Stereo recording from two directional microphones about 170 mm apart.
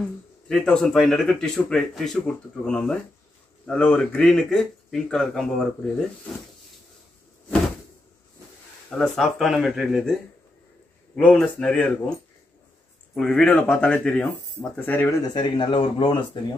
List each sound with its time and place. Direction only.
0.5 s speech: 5° left (ahead or behind)
8.9 s speech: 5° left (ahead or behind)
11.1 s speech: 5° left (ahead or behind)
13.1 s speech: 5° left (ahead or behind)
15.2 s speech: 25° left (ahead or behind)